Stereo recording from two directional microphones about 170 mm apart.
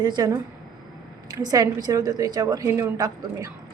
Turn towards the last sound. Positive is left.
turn(degrees=-20)  # may be behind; listen again after turning